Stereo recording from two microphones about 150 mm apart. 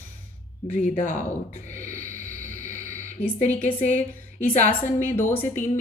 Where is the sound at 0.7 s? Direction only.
60° left (ahead or behind).